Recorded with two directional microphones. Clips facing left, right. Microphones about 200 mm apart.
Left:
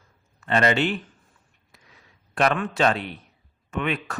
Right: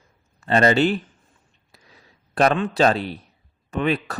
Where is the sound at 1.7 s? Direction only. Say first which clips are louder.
Right 3 dB; 35° right (ahead or behind).